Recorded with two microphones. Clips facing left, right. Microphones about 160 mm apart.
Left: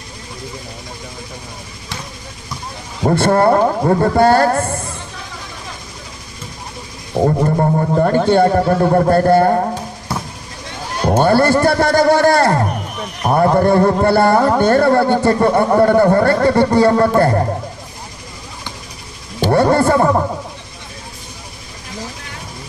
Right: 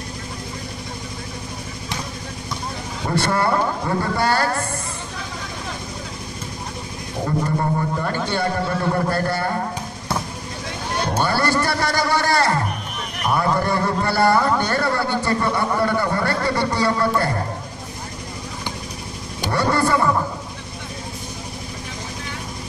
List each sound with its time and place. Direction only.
3.0 s speech: 45° left (ahead or behind)
7.2 s speech: 45° left (ahead or behind)
8.7 s speech: 40° left (ahead or behind)
11.1 s speech: 50° left (ahead or behind)
19.5 s speech: 55° left (ahead or behind)